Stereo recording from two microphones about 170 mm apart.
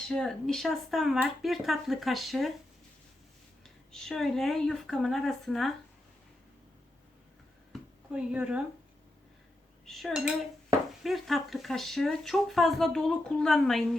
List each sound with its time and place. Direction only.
0.1 s speech: 5° left (ahead or behind)
3.9 s speech: 5° left (ahead or behind)
7.7 s a sound: 5° right (ahead or behind)
9.8 s speech: centre (ahead or behind)